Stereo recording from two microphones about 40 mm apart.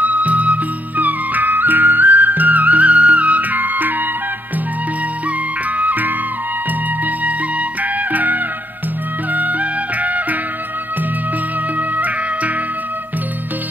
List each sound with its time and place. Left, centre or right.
0.0 s music: right
5.8 s music: right